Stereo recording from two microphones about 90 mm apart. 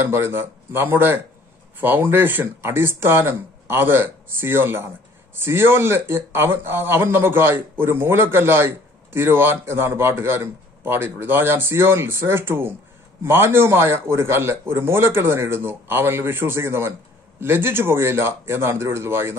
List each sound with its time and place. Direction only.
0.0 s speech: 30° right (ahead or behind)